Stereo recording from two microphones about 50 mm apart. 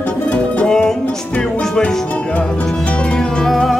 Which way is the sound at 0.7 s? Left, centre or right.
Centre.